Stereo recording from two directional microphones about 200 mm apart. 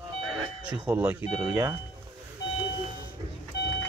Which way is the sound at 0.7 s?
5° right (ahead or behind).